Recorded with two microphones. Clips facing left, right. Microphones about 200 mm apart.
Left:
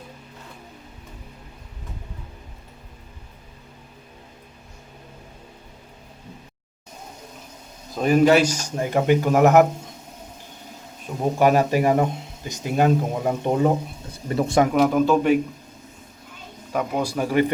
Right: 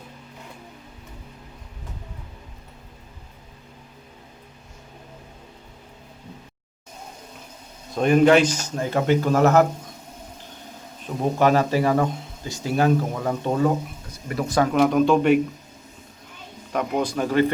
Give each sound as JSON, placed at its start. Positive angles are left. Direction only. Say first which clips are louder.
{"t": 7.9, "sound": "speech", "louder": "right 1 dB", "side_deg": 5}
{"t": 11.2, "sound": "speech", "louder": "left 1 dB", "side_deg": 10}
{"t": 14.7, "sound": "speech", "louder": "even", "side_deg": 5}
{"t": 16.7, "sound": "speech", "louder": "even", "side_deg": 5}